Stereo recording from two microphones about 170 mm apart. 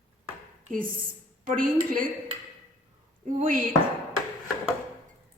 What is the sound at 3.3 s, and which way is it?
Speech, 50° right (ahead or behind).